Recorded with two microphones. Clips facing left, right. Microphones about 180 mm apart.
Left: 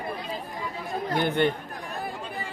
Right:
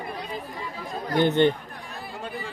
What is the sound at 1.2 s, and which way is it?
Speech, 20° right (ahead or behind).